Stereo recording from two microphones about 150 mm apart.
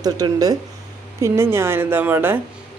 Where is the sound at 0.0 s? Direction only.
25° right (ahead or behind).